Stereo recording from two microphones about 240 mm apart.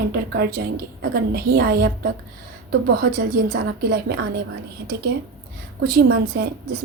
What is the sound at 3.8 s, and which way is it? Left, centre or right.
Speech, right.